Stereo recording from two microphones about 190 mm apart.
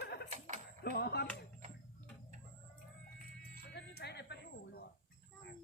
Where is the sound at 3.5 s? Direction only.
55° left (ahead or behind).